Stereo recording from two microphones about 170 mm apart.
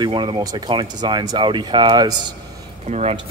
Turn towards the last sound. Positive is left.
turn(degrees=-40)  # may be behind; listen again after turning